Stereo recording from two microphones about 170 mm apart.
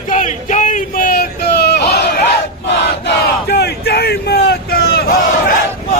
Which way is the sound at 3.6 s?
70° left (ahead or behind).